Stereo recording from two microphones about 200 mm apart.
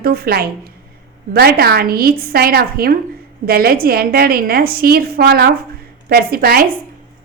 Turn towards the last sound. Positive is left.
turn(degrees=-50)  # may be behind; listen again after turning